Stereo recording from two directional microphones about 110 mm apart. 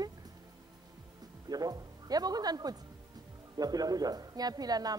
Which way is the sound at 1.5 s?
35° right (ahead or behind).